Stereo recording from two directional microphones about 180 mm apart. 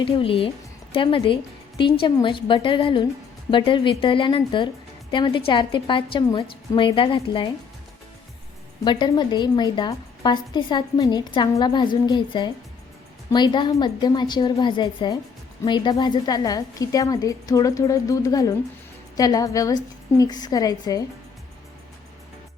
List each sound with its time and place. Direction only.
0.0 s a woman's voice: 30° left (ahead or behind)
8.8 s a woman's voice: 25° left (ahead or behind)